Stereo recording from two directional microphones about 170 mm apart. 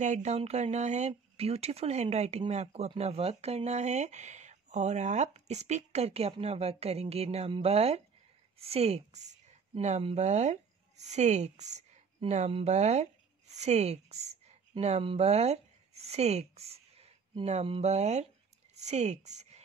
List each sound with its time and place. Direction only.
0.0 s a woman's voice: 45° right (ahead or behind)